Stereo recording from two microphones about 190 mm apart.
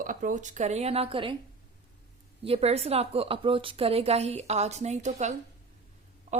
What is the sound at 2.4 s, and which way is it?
Speech, 30° right (ahead or behind).